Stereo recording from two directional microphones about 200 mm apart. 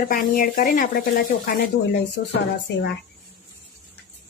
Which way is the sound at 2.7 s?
60° left (ahead or behind).